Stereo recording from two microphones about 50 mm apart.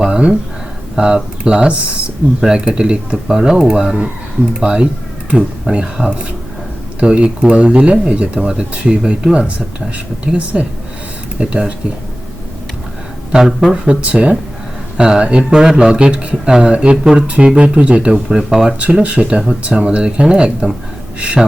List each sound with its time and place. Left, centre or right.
0.0 s a sound: right
0.9 s speech: centre
13.3 s speech: centre
14.0 s speech: right
18.1 s speech: centre
18.8 s speech: right